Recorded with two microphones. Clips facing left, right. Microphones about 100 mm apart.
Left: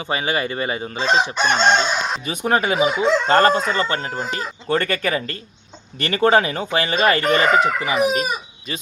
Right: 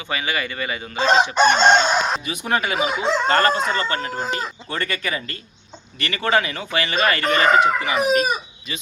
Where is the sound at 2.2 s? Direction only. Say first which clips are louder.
Left 3 dB; 35° left (ahead or behind).